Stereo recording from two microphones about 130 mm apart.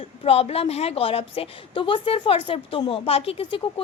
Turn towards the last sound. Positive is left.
turn(degrees=45)  # may be behind; listen again after turning